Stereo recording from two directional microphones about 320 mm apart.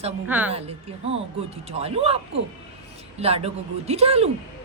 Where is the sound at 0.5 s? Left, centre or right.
Centre.